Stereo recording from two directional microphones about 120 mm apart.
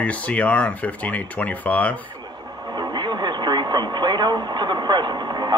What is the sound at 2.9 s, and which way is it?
Speech, 40° right (ahead or behind).